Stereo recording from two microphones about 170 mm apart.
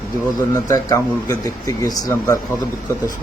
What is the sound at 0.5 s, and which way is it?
A man's voice, 20° left (ahead or behind).